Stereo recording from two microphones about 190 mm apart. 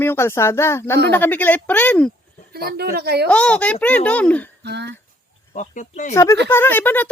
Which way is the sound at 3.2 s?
5° left (ahead or behind).